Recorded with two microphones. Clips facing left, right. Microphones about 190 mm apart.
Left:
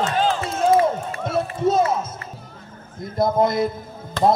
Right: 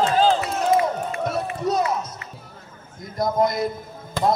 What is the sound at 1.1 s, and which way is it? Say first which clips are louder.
Run: left 1 dB; 25° left (ahead or behind).